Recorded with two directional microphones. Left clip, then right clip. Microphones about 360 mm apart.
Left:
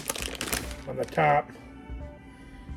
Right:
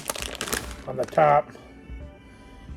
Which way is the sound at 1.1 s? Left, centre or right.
Centre.